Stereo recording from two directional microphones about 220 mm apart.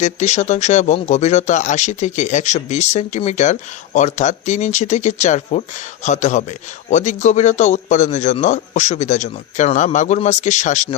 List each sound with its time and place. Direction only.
0.0 s speech: 30° left (ahead or behind)